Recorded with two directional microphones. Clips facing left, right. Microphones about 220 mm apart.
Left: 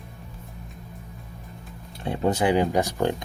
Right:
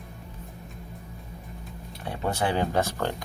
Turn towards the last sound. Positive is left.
turn(degrees=15)  # may be behind; listen again after turning